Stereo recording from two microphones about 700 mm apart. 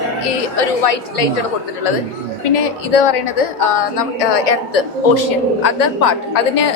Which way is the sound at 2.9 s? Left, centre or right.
Left.